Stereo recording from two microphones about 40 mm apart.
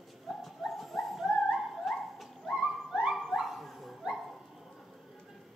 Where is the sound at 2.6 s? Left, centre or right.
Right.